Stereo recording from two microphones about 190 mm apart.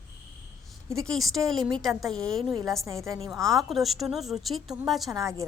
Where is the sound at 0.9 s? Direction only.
Centre (ahead or behind).